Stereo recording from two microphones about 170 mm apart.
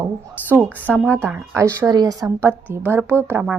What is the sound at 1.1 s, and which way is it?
A woman's voice, 15° right (ahead or behind).